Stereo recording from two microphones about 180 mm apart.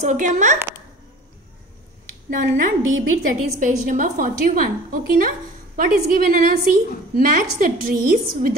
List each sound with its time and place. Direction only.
0.0 s a woman's voice: 45° right (ahead or behind)
2.5 s a woman's voice: 55° right (ahead or behind)